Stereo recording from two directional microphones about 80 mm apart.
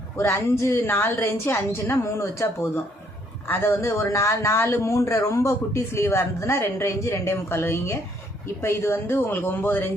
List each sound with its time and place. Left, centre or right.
0.2 s speech: left